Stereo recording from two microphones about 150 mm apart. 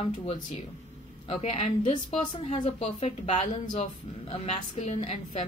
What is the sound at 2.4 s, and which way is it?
Speech, 40° left (ahead or behind).